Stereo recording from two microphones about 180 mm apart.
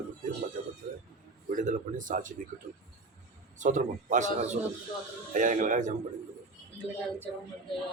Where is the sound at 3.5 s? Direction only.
45° right (ahead or behind).